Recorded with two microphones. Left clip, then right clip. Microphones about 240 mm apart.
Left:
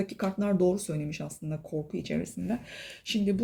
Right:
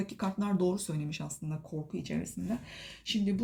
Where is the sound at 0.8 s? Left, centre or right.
Right.